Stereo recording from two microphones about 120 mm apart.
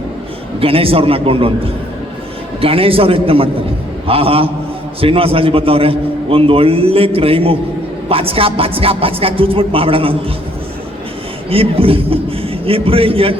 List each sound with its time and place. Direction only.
0.6 s a man's voice: 50° right (ahead or behind)
2.6 s a man's voice: 50° right (ahead or behind)
11.4 s a man's voice: 50° right (ahead or behind)